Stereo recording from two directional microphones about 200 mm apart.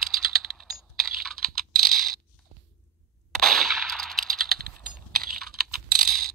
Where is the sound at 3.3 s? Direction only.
Centre (ahead or behind).